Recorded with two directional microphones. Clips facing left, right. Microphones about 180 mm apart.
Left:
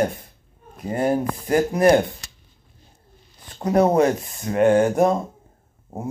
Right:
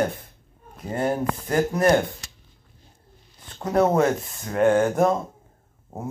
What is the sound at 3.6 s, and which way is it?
Speech, 15° left (ahead or behind).